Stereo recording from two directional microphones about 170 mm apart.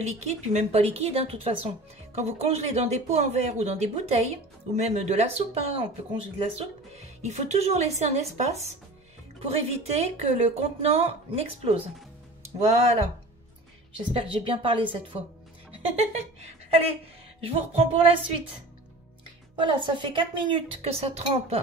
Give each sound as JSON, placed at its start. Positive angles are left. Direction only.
{"t": 0.0, "sound": "a woman's voice", "side_deg": -40}
{"t": 13.9, "sound": "a woman's voice", "side_deg": -30}
{"t": 16.0, "sound": "a woman's voice", "side_deg": -40}
{"t": 17.4, "sound": "a woman's voice", "side_deg": -35}
{"t": 19.5, "sound": "a woman's voice", "side_deg": -30}